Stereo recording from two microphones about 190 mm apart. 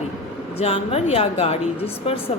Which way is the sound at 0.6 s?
30° left (ahead or behind).